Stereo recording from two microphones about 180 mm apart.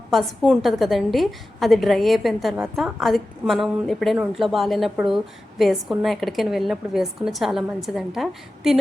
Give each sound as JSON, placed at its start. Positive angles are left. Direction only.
{"t": 0.1, "sound": "a woman's voice", "side_deg": 0}